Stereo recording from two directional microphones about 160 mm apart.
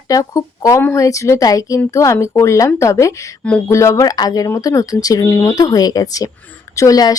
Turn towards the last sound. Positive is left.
turn(degrees=20)  # may be behind; listen again after turning